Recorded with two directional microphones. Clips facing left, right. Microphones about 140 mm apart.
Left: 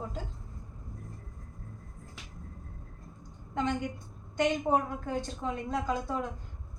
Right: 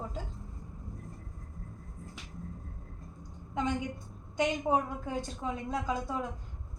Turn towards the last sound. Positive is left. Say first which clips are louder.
# left 2 dB
turn(degrees=0)  # may be behind; listen again after turning